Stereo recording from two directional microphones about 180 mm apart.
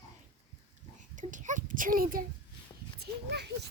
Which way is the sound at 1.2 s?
45° right (ahead or behind).